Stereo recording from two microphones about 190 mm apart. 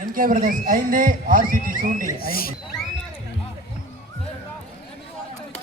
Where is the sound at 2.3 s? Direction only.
50° left (ahead or behind).